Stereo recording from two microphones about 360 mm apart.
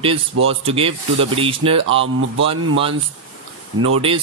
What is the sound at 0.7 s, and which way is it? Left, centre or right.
Speech, centre.